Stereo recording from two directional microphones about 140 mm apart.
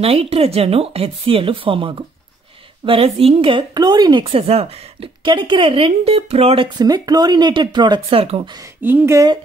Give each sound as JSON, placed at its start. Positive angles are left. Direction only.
{"t": 0.0, "sound": "a woman's voice", "side_deg": -45}
{"t": 4.2, "sound": "a woman's voice", "side_deg": -45}
{"t": 6.8, "sound": "speech", "side_deg": -30}
{"t": 8.8, "sound": "speech", "side_deg": -15}